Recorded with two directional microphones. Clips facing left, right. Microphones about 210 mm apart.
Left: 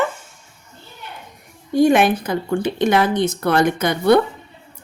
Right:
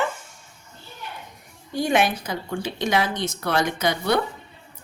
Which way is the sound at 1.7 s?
50° left (ahead or behind).